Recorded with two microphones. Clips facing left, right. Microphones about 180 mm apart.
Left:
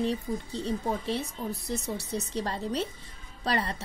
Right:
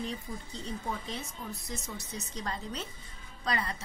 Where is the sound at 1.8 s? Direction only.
35° left (ahead or behind).